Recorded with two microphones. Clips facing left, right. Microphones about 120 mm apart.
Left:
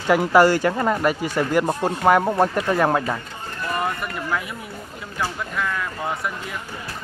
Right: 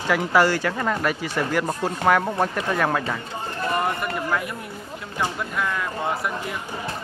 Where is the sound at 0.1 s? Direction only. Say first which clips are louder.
Left 4 dB; 40° left (ahead or behind).